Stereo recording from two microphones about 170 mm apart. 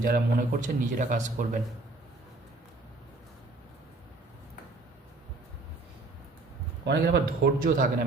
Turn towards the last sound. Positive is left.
turn(degrees=-65)  # may be behind; listen again after turning